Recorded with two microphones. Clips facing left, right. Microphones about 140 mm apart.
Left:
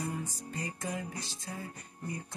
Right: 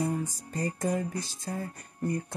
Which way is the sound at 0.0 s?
45° right (ahead or behind).